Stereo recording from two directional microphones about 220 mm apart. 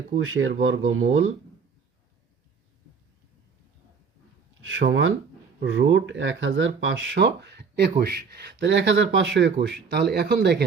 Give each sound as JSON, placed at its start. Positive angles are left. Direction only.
{"t": 0.2, "sound": "speech", "side_deg": -65}
{"t": 4.8, "sound": "speech", "side_deg": -55}